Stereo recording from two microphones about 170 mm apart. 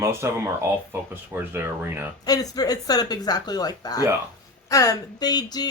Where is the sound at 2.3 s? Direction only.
20° left (ahead or behind).